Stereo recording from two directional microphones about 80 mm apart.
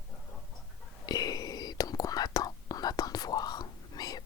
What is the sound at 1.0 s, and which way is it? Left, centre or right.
Whispering, left.